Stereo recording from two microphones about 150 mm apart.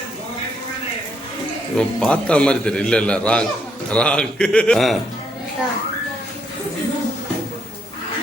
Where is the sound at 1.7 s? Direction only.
5° left (ahead or behind).